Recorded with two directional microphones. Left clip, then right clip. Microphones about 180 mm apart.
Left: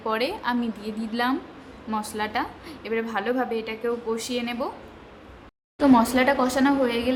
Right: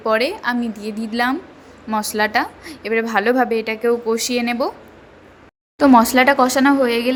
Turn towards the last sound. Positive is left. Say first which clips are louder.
# right 7 dB
turn(degrees=-30)  # may be behind; listen again after turning